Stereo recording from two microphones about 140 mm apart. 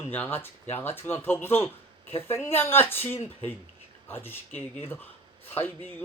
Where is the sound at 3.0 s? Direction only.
50° left (ahead or behind).